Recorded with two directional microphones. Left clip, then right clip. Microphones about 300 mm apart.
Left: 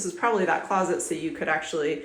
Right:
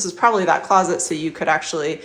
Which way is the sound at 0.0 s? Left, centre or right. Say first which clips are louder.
Right 7 dB; centre.